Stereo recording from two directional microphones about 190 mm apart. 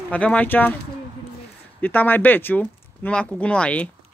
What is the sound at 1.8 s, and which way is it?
Speech, 10° left (ahead or behind).